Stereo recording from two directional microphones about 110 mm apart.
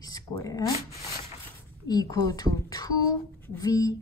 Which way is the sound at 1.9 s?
35° left (ahead or behind).